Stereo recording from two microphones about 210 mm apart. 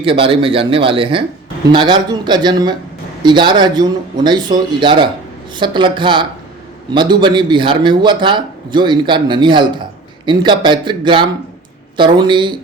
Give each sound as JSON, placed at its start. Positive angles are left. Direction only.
{"t": 0.0, "sound": "a man's voice", "side_deg": -25}